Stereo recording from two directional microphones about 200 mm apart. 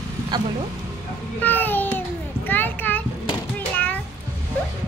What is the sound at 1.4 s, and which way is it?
Babbling, 10° left (ahead or behind).